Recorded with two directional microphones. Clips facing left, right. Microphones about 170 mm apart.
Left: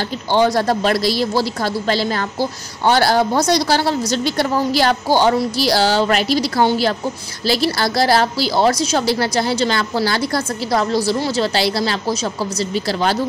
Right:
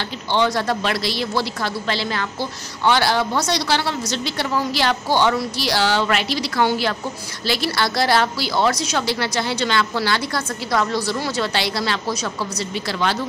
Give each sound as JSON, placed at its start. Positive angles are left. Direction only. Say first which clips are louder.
{"t": 0.3, "sound": "a woman's voice", "louder": "left 4 dB", "side_deg": 40}